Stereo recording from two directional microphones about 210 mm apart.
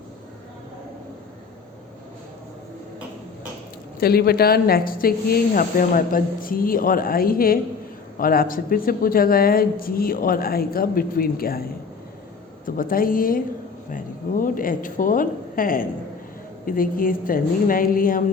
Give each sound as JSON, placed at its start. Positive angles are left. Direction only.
{"t": 4.0, "sound": "speech", "side_deg": 45}
{"t": 12.6, "sound": "speech", "side_deg": 40}